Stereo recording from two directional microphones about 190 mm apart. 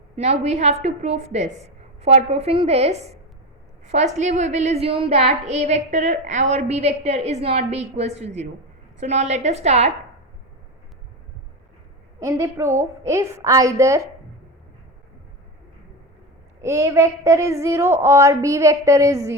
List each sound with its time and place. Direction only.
0.2 s a woman's voice: 35° right (ahead or behind)
12.2 s a woman's voice: 15° right (ahead or behind)
16.6 s a woman's voice: 15° right (ahead or behind)